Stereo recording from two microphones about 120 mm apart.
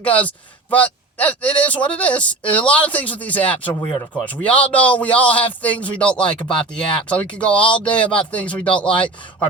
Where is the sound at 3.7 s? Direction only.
35° left (ahead or behind).